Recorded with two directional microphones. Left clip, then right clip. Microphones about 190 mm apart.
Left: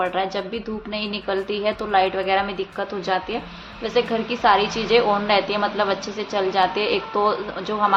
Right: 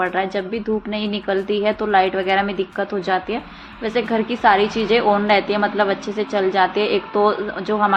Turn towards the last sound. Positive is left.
turn(degrees=-20)  # may be behind; listen again after turning